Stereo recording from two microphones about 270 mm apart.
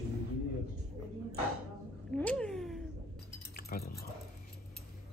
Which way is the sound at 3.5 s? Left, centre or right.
Left.